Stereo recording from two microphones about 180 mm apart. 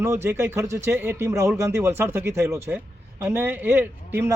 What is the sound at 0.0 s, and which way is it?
Speech, 15° right (ahead or behind).